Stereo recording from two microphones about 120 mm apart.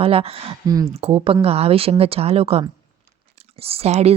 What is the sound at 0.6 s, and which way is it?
Speech, 35° right (ahead or behind).